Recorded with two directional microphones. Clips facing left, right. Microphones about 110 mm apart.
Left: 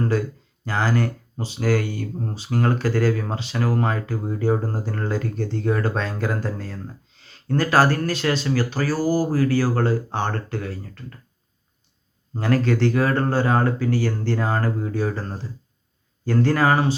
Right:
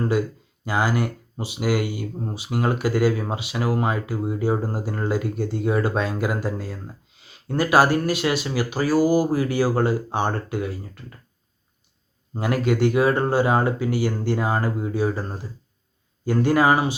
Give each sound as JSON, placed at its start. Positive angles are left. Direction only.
{"t": 0.1, "sound": "speech", "side_deg": -15}
{"t": 12.3, "sound": "speech", "side_deg": -15}